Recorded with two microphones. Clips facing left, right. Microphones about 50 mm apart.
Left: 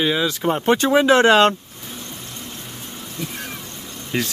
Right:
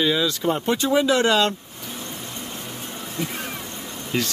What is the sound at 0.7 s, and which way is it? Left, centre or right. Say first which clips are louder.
Speech: left 6 dB; left.